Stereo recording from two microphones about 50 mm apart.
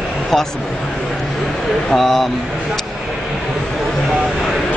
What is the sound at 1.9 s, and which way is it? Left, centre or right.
Speech, centre.